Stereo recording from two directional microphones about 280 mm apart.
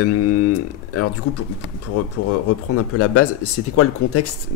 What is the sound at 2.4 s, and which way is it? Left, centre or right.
Speech, left.